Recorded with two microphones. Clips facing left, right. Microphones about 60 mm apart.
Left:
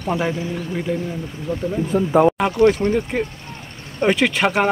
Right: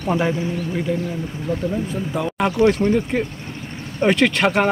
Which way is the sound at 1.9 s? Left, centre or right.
Left.